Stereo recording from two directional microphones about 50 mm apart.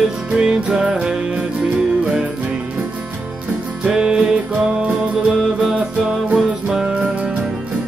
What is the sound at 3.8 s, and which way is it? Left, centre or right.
Music, centre.